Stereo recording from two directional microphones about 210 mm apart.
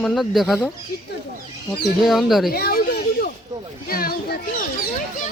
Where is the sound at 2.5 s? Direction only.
45° left (ahead or behind).